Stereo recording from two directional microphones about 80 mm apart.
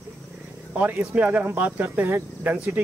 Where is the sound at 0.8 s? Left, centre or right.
Right.